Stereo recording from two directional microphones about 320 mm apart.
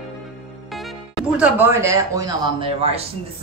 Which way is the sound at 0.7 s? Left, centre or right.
Centre.